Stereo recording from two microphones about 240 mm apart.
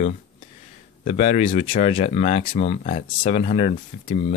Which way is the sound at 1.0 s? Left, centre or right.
Left.